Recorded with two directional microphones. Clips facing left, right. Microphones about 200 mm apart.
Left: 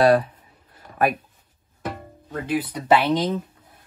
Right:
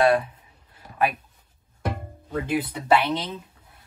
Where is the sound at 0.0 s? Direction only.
35° left (ahead or behind).